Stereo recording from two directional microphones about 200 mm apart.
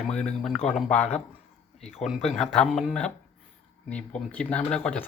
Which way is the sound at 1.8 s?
30° left (ahead or behind).